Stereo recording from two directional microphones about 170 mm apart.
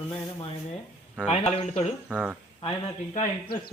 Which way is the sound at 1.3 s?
40° left (ahead or behind).